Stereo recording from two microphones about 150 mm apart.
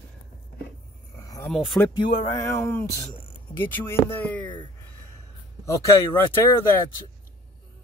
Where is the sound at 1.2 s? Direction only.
20° left (ahead or behind).